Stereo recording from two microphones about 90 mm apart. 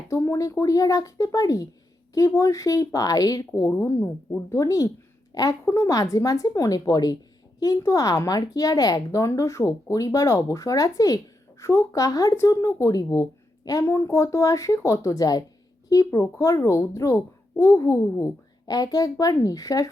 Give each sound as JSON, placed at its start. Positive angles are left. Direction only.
{"t": 0.1, "sound": "speech", "side_deg": 35}
{"t": 3.8, "sound": "a woman's voice", "side_deg": 30}
{"t": 5.6, "sound": "speech", "side_deg": 35}
{"t": 18.6, "sound": "a child's voice", "side_deg": 45}